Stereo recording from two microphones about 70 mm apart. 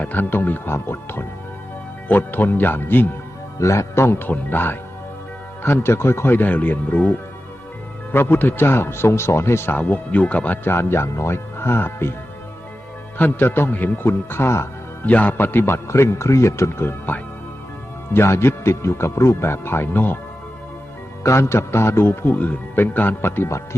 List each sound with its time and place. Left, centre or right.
0.0 s speech: left
3.6 s a man's voice: left
9.7 s a man's voice: left
13.1 s a man's voice: left
15.0 s a man's voice: left
18.1 s a man's voice: left
21.2 s a man's voice: left